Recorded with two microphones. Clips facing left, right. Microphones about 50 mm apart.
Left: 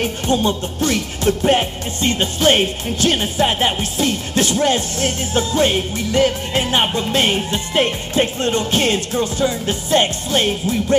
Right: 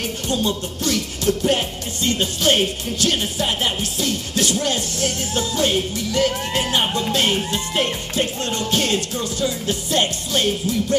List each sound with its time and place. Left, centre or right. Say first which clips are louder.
0.0 s music: left 5 dB; left